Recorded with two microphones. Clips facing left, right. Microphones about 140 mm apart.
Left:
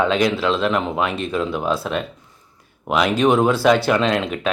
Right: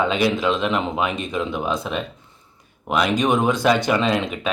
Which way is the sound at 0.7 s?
Centre (ahead or behind).